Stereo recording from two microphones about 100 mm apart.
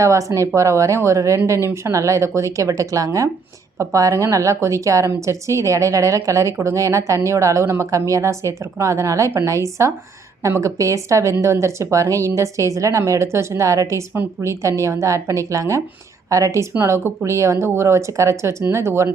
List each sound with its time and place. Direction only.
0.0 s speech: 30° right (ahead or behind)